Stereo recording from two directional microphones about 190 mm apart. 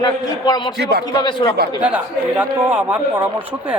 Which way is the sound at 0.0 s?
20° left (ahead or behind).